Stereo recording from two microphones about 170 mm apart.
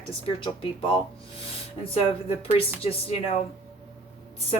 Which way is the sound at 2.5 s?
35° left (ahead or behind).